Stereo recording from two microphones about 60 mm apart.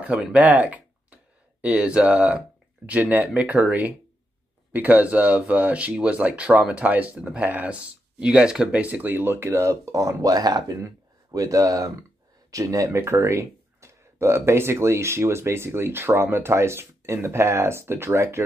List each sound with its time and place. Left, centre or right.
0.0 s speech: right
4.7 s speech: right
8.8 s speech: right
9.7 s speech: right
11.3 s speech: right
12.4 s speech: right